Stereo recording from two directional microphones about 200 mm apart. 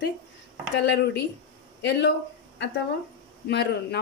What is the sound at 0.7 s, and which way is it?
Speech, 60° left (ahead or behind).